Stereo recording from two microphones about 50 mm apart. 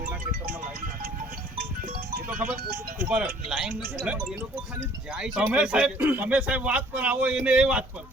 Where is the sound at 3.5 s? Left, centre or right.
Centre.